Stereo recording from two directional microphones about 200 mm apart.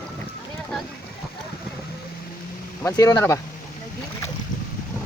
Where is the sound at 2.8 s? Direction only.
15° left (ahead or behind).